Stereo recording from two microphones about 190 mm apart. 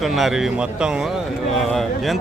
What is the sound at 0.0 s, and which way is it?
Speech, centre (ahead or behind).